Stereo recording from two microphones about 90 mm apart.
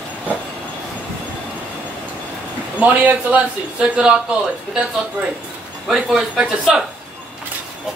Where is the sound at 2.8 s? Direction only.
15° right (ahead or behind).